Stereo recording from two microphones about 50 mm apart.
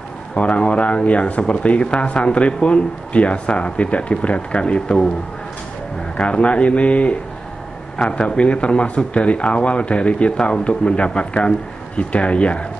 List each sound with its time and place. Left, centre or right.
0.4 s speech: left
6.1 s speech: left